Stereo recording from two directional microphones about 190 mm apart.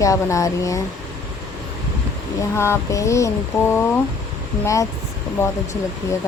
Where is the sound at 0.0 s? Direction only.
15° left (ahead or behind).